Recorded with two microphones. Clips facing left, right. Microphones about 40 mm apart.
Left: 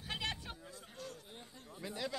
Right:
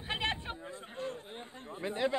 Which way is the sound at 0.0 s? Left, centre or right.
Right.